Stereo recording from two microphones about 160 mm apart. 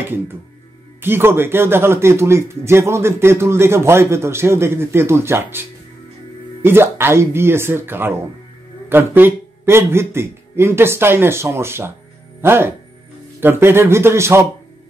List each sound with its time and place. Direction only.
1.0 s speech: 15° right (ahead or behind)